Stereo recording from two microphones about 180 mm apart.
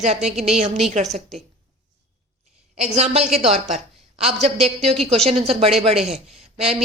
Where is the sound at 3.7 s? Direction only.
35° right (ahead or behind).